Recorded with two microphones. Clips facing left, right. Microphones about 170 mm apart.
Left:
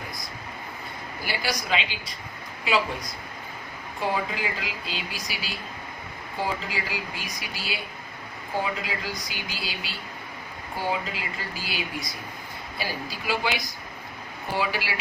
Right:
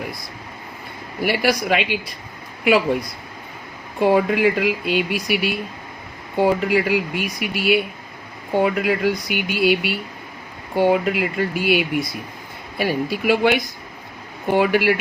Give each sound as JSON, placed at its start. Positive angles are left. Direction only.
{"t": 1.2, "sound": "speech", "side_deg": -60}
{"t": 4.0, "sound": "speech", "side_deg": -65}